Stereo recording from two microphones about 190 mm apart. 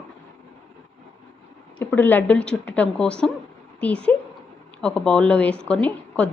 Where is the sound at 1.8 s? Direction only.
10° left (ahead or behind).